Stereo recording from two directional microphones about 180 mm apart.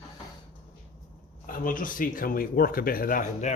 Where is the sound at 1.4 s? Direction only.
50° left (ahead or behind).